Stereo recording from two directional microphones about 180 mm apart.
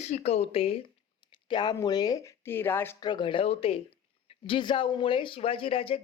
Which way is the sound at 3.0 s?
25° left (ahead or behind).